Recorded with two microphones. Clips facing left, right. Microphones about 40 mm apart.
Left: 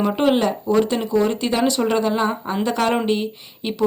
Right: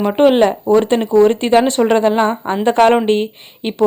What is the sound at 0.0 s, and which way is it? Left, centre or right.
Speech, right.